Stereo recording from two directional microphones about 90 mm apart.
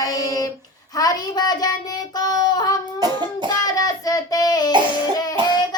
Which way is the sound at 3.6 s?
40° left (ahead or behind).